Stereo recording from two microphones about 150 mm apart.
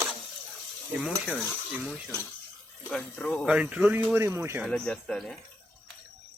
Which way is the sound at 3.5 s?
5° right (ahead or behind).